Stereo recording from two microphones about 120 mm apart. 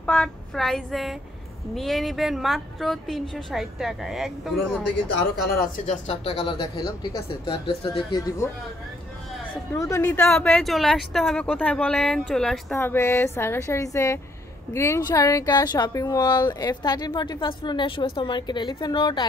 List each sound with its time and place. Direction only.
0.0 s a woman's voice: 5° left (ahead or behind)
5.9 s speech: 60° left (ahead or behind)
6.6 s speech: 45° left (ahead or behind)
8.1 s a woman's voice: 30° left (ahead or behind)
9.8 s a woman's voice: 25° left (ahead or behind)
10.0 s speech: 15° left (ahead or behind)
10.6 s a woman's voice: centre (ahead or behind)
12.7 s a woman's voice: 20° left (ahead or behind); by 19.2 s 40° left (ahead or behind)